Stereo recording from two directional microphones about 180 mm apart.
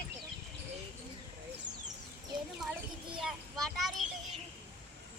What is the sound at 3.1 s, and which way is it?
Speech, centre (ahead or behind).